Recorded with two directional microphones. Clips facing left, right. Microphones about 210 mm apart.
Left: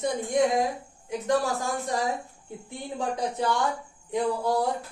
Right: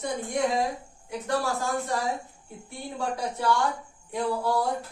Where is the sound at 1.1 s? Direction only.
15° left (ahead or behind).